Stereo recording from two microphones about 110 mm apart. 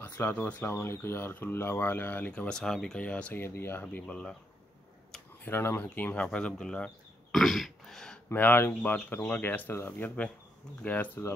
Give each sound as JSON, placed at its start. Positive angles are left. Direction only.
{"t": 0.0, "sound": "speech", "side_deg": 15}
{"t": 3.8, "sound": "speech", "side_deg": 10}
{"t": 5.4, "sound": "speech", "side_deg": 20}
{"t": 7.3, "sound": "throat clearing", "side_deg": 0}
{"t": 8.3, "sound": "speech", "side_deg": 20}